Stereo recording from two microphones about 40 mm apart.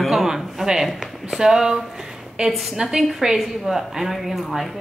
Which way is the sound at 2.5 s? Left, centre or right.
Centre.